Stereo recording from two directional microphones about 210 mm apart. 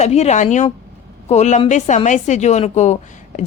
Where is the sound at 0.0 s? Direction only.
30° left (ahead or behind).